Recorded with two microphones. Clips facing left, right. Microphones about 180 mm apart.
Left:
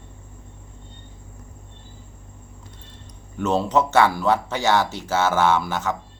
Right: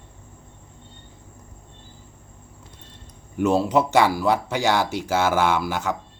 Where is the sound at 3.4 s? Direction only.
10° right (ahead or behind).